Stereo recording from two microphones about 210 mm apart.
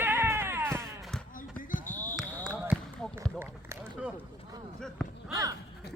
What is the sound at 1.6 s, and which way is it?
Basketball bounce, 40° left (ahead or behind).